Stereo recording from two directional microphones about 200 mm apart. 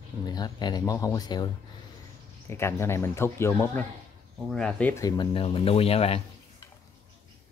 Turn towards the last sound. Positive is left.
turn(degrees=30)  # may be behind; listen again after turning